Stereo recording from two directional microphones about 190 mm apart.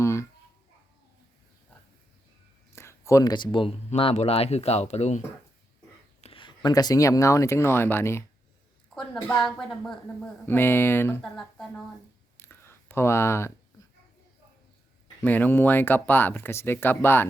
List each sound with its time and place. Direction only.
0.0 s a sound: 15° left (ahead or behind)
2.7 s speech: 15° left (ahead or behind); by 5.2 s 35° left (ahead or behind)
6.2 s speech: 25° left (ahead or behind)
9.4 s a woman's voice: centre (ahead or behind)
12.4 s a sound: 10° left (ahead or behind)
15.2 s speech: 10° left (ahead or behind)